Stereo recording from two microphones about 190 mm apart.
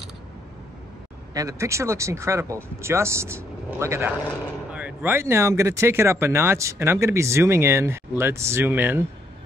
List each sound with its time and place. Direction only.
1.3 s speech: 15° right (ahead or behind)